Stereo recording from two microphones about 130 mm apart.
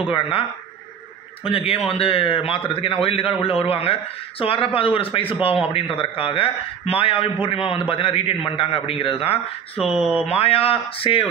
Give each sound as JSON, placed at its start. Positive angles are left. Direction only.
{"t": 0.1, "sound": "a man's voice", "side_deg": 40}
{"t": 9.8, "sound": "speech", "side_deg": -5}
{"t": 10.2, "sound": "a man's voice", "side_deg": 50}